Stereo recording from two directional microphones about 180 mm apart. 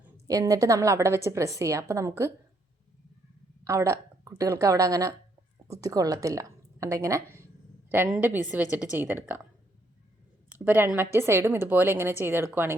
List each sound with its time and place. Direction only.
0.3 s a woman's voice: 20° right (ahead or behind)
3.6 s a woman's voice: 15° right (ahead or behind)
10.6 s a woman's voice: 10° right (ahead or behind)